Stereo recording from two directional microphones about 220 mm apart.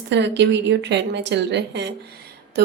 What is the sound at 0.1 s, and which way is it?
A woman's voice, 50° right (ahead or behind).